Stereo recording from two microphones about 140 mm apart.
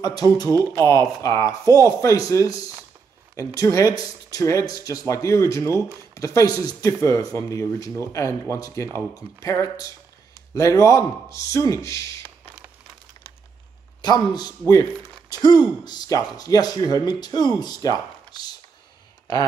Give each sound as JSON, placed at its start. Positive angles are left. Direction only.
{"t": 0.0, "sound": "speech", "side_deg": 25}
{"t": 0.5, "sound": "speech", "side_deg": -25}
{"t": 0.8, "sound": "speech", "side_deg": 20}
{"t": 14.0, "sound": "speech", "side_deg": 30}